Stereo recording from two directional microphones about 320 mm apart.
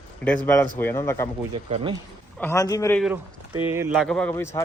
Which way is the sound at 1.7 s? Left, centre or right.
Centre.